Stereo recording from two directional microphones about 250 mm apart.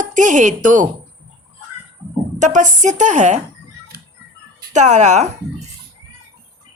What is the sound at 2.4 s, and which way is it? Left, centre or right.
Speech, right.